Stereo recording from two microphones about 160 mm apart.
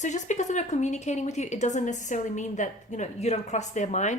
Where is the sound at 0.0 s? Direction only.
50° left (ahead or behind).